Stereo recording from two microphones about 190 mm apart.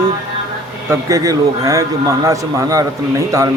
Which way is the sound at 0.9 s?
15° right (ahead or behind).